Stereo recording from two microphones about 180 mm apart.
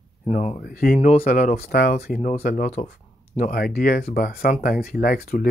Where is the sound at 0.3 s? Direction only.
45° left (ahead or behind); by 2.1 s 60° left (ahead or behind).